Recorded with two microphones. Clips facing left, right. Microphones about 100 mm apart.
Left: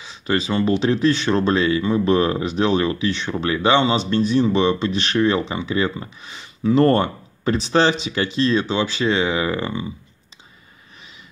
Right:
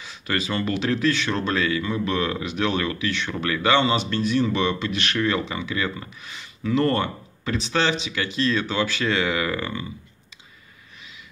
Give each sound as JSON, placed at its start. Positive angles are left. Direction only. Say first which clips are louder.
{"t": 0.0, "sound": "speech", "louder": "left 5 dB", "side_deg": 25}